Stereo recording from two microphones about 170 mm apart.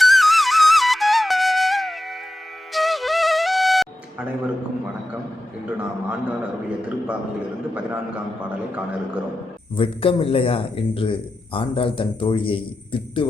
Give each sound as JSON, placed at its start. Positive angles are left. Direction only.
{"t": 0.0, "sound": "flute", "side_deg": 0}
{"t": 5.6, "sound": "a man's voice", "side_deg": -10}
{"t": 8.4, "sound": "a man's voice", "side_deg": -10}
{"t": 9.7, "sound": "a man's voice", "side_deg": 30}